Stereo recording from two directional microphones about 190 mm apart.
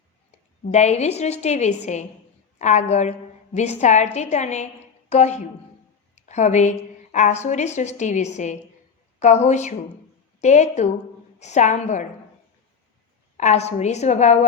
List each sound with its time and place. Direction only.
0.3 s a woman's voice: 35° left (ahead or behind)
13.3 s a woman's voice: 35° left (ahead or behind)